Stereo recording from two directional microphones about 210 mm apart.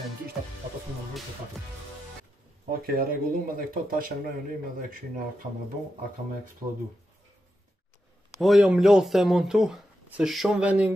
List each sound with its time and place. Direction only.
2.6 s speech: 45° right (ahead or behind)
6.6 s speech: 20° right (ahead or behind)
8.4 s speech: centre (ahead or behind)